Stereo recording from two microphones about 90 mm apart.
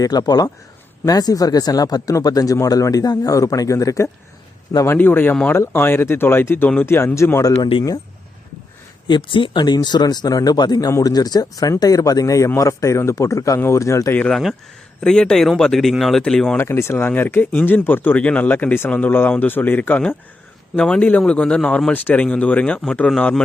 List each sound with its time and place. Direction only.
0.0 s speech: 45° left (ahead or behind)
4.9 s speech: 25° left (ahead or behind)
9.0 s speech: 65° left (ahead or behind); by 14.1 s 35° left (ahead or behind)
14.3 s speech: 5° left (ahead or behind)
16.6 s speech: 30° left (ahead or behind); by 23.4 s 10° left (ahead or behind)